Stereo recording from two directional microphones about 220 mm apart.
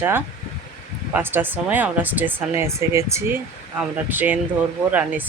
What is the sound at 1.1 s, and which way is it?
Speech, 10° right (ahead or behind).